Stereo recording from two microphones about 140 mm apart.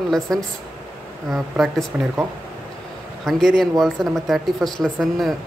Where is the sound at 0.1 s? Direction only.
5° left (ahead or behind).